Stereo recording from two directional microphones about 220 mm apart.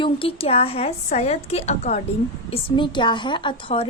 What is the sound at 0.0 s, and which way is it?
A woman's voice, 25° left (ahead or behind).